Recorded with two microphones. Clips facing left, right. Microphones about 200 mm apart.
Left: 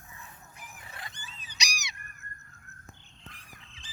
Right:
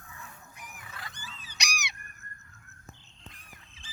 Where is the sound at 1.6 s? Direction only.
55° right (ahead or behind).